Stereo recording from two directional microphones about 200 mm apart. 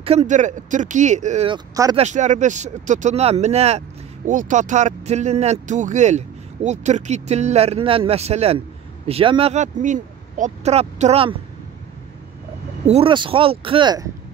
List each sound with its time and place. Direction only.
0.0 s speech: 30° right (ahead or behind)
12.8 s speech: 30° right (ahead or behind)